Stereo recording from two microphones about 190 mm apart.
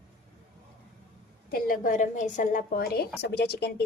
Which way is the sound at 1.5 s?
45° left (ahead or behind).